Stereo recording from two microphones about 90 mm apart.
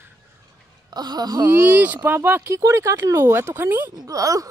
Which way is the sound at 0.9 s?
50° right (ahead or behind).